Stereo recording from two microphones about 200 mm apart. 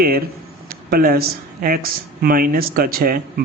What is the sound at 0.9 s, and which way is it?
Speech, 50° right (ahead or behind).